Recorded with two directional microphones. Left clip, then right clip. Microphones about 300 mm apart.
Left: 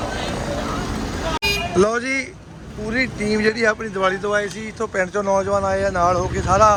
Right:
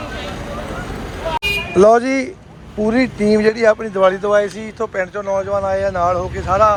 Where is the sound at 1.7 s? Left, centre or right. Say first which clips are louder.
Right 10 dB; centre.